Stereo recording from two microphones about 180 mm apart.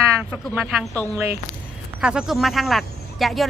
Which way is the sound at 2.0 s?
5° right (ahead or behind).